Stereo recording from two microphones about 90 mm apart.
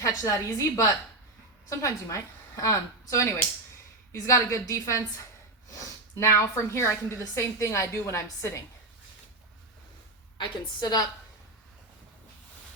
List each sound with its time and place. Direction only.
0.0 s a woman's voice: 40° left (ahead or behind)
10.3 s a woman's voice: 55° left (ahead or behind)